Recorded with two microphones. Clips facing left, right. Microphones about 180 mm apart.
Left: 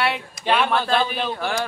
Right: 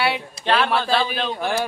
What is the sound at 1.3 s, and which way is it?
Speech, 15° right (ahead or behind).